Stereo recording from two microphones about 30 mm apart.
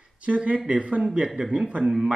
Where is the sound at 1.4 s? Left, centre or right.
Right.